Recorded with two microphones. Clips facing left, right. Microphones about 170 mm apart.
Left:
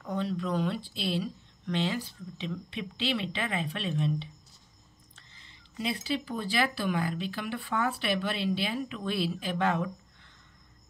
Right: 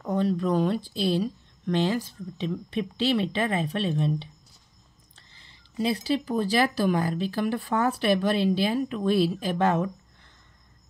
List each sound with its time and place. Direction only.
0.0 s speech: 40° right (ahead or behind)